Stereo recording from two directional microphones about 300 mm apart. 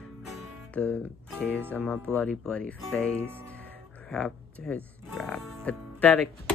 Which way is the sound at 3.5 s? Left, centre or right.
Centre.